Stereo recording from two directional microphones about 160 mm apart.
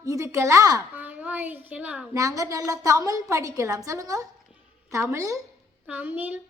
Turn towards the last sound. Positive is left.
turn(degrees=-10)  # may be behind; listen again after turning